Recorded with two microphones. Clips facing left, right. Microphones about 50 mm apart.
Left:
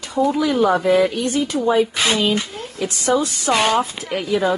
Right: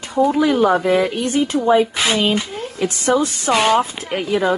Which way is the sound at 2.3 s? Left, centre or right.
Centre.